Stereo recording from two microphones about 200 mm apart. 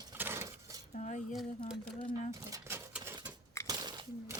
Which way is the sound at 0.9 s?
35° left (ahead or behind).